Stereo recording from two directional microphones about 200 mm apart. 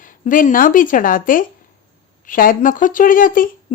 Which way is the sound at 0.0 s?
40° left (ahead or behind).